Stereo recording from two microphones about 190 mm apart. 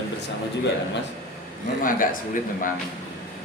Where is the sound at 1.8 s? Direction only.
45° left (ahead or behind).